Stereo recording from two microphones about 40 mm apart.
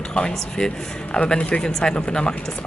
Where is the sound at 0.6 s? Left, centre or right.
Left.